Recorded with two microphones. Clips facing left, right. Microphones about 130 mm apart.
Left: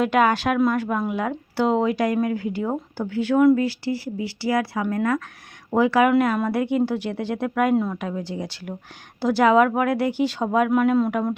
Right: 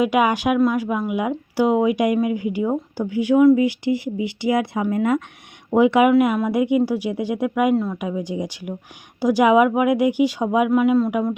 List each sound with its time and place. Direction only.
0.0 s speech: 10° right (ahead or behind)
6.1 s speech: 5° right (ahead or behind)